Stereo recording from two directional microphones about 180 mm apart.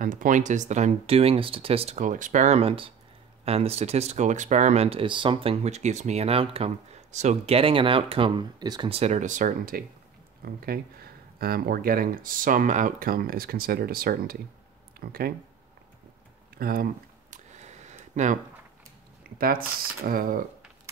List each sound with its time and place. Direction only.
0.0 s speech: 45° right (ahead or behind)
16.5 s a sound: 55° right (ahead or behind)
19.2 s speech: 55° right (ahead or behind)